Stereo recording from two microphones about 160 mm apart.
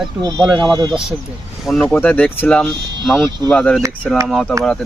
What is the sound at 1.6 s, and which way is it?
Speech, 5° left (ahead or behind).